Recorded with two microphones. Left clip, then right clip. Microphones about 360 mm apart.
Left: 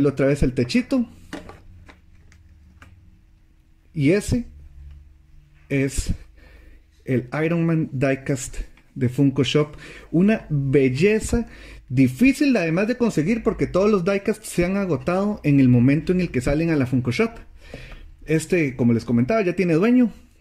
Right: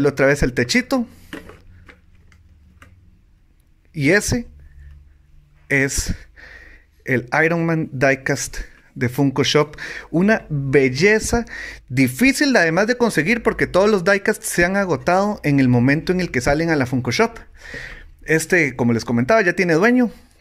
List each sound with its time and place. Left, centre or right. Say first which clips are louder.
0.0 s a man's voice: right 4 dB; centre
3.9 s a man's voice: right 4 dB; centre
5.7 s a sound: right 6 dB; centre
7.1 s a man's voice: right 6 dB; centre